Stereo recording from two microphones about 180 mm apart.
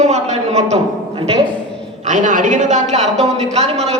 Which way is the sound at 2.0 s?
45° right (ahead or behind).